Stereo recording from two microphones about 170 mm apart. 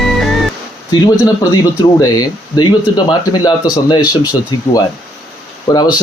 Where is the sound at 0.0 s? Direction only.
Centre (ahead or behind).